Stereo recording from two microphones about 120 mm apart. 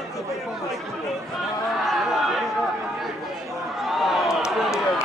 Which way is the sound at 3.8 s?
Centre (ahead or behind).